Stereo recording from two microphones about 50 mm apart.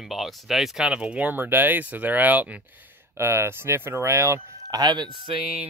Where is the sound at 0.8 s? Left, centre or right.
Right.